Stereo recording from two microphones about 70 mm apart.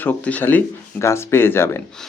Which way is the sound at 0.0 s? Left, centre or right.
Left.